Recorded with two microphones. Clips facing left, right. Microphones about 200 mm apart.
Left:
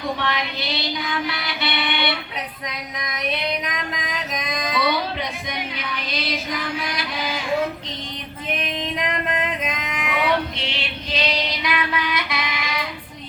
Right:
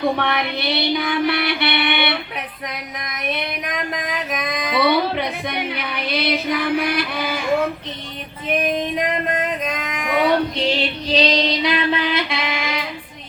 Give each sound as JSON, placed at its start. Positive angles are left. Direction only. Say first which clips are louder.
{"t": 0.0, "sound": "music", "louder": "right 5 dB", "side_deg": -60}
{"t": 2.6, "sound": "female singing", "louder": "right 1 dB", "side_deg": -55}
{"t": 3.9, "sound": "music", "louder": "right 4 dB", "side_deg": -60}
{"t": 8.6, "sound": "music", "louder": "right 5 dB", "side_deg": -45}